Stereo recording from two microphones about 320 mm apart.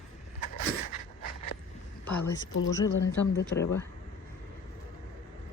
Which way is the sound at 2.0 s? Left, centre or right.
Left.